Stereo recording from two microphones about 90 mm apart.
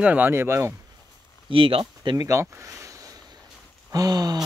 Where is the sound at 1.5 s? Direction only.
90° right.